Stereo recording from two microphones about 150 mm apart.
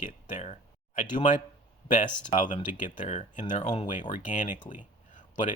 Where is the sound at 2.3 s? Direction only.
55° left (ahead or behind).